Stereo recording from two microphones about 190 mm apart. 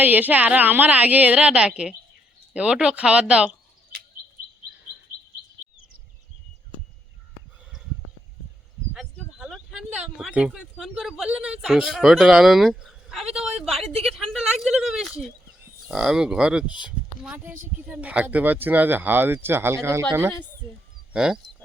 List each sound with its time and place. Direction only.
0.0 s speech: 10° right (ahead or behind)
9.1 s speech: centre (ahead or behind)
13.2 s a woman's voice: 35° right (ahead or behind)
13.7 s a woman's voice: centre (ahead or behind)